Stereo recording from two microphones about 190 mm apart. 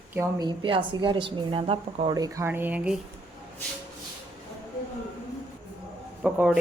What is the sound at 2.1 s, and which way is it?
Speech, 15° right (ahead or behind).